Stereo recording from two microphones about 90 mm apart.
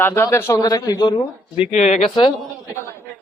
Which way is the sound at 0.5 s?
45° left (ahead or behind).